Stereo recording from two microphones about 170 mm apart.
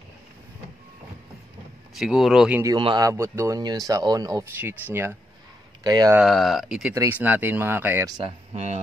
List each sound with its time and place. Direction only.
2.0 s speech: centre (ahead or behind)
2.6 s speech: 25° right (ahead or behind)
5.9 s speech: 20° right (ahead or behind)
6.1 s speech: centre (ahead or behind)
8.2 s speech: 35° right (ahead or behind)